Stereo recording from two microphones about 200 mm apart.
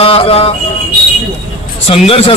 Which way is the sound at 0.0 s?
30° left (ahead or behind).